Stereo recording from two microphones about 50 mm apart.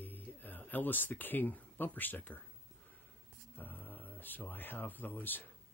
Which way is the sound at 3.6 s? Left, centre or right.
Left.